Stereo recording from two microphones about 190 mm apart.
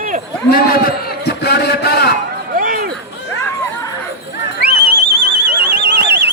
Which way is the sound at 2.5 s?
50° right (ahead or behind).